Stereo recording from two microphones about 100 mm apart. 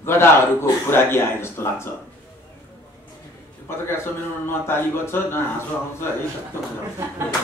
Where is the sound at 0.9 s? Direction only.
25° left (ahead or behind).